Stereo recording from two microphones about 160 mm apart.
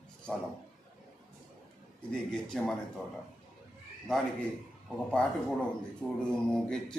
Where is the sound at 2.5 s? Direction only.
5° left (ahead or behind).